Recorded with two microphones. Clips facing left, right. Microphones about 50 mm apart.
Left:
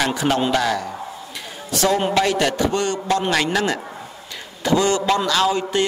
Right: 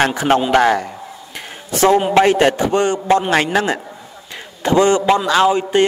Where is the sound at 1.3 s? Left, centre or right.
Right.